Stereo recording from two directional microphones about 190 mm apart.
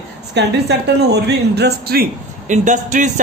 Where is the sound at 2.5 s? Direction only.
40° right (ahead or behind).